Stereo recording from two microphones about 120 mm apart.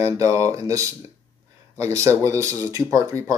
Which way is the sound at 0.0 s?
25° right (ahead or behind).